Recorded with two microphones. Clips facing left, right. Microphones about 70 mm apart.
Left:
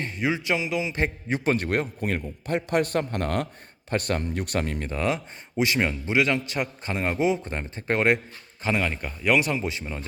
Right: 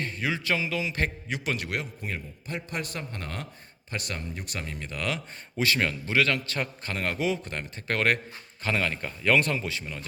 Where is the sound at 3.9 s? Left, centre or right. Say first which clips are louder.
Left 9 dB; left.